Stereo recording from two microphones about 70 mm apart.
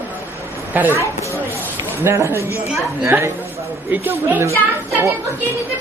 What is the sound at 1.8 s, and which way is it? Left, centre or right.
Speech, right.